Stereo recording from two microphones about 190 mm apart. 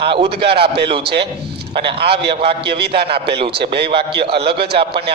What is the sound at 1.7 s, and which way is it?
Speech, 25° right (ahead or behind).